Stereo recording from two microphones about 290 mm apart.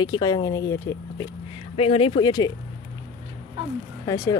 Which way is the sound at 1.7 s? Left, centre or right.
Centre.